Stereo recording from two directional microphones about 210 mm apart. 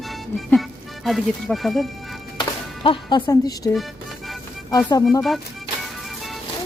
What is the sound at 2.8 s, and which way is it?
Speech, 25° left (ahead or behind).